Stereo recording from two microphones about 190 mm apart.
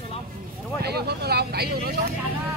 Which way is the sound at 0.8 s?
60° right (ahead or behind).